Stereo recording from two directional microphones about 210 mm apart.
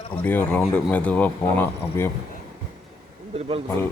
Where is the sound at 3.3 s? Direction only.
25° right (ahead or behind).